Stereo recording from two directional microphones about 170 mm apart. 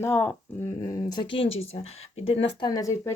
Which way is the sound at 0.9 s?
20° left (ahead or behind).